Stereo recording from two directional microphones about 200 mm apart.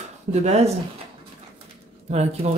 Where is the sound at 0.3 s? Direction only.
35° right (ahead or behind).